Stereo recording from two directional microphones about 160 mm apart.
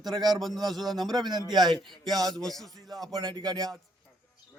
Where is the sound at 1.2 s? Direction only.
25° right (ahead or behind).